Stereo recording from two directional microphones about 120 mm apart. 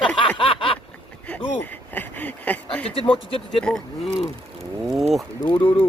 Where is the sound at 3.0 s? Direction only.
50° left (ahead or behind).